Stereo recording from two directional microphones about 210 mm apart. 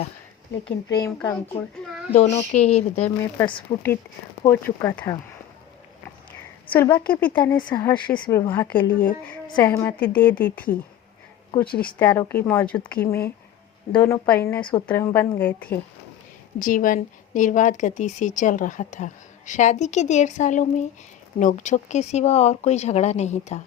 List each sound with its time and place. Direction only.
0.9 s a woman's voice: 15° left (ahead or behind)
2.1 s speech: 35° left (ahead or behind)
4.4 s a woman's voice: 10° left (ahead or behind)
6.7 s a woman's voice: 10° left (ahead or behind)
7.7 s a woman's voice: 20° left (ahead or behind)
11.6 s speech: 45° left (ahead or behind)
11.9 s a woman's voice: 10° left (ahead or behind)
14.6 s speech: 25° left (ahead or behind)
14.8 s a woman's voice: 10° left (ahead or behind)
16.6 s speech: 40° left (ahead or behind)